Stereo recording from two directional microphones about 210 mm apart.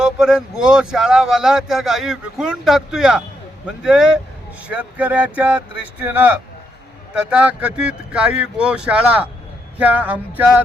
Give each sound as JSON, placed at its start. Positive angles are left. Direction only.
{"t": 0.0, "sound": "speech", "side_deg": -5}